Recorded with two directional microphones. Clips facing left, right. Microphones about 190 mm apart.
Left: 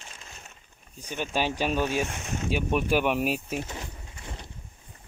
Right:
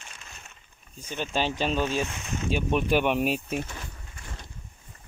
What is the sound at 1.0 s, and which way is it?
Speech, 10° left (ahead or behind).